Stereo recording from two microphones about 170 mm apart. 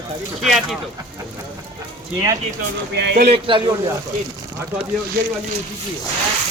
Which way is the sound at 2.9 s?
90° right.